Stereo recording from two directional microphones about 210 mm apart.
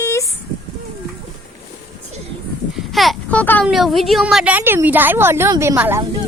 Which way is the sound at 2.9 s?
Centre (ahead or behind).